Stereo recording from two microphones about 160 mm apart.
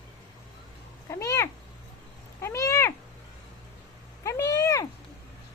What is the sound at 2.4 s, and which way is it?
Cat, 20° left (ahead or behind).